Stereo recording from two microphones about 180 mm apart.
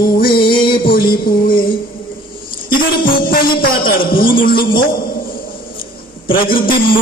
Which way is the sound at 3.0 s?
55° left (ahead or behind).